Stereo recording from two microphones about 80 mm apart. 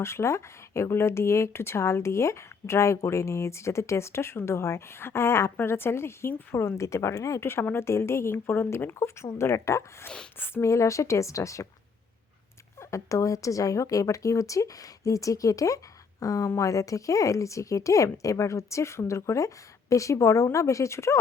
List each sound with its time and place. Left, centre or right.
0.0 s speech: left
12.9 s a woman's voice: left